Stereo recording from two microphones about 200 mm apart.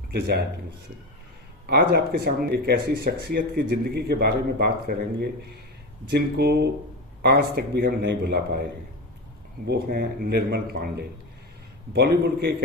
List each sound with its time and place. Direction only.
0.1 s speech: 55° right (ahead or behind)
1.7 s speech: 55° right (ahead or behind)
9.7 s speech: 50° right (ahead or behind)